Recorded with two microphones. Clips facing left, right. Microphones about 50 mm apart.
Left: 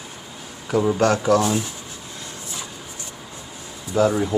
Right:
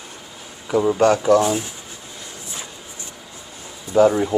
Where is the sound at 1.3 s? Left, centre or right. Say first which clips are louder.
Right 2 dB; centre.